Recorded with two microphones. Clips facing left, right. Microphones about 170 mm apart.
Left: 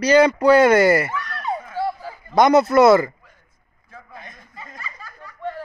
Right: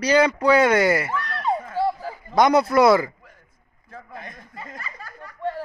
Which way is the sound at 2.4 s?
10° right (ahead or behind).